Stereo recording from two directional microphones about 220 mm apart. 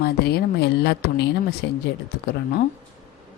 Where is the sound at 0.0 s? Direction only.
45° left (ahead or behind).